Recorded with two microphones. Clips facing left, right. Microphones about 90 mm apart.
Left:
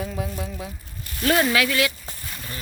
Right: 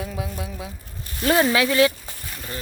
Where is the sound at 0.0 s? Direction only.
5° right (ahead or behind).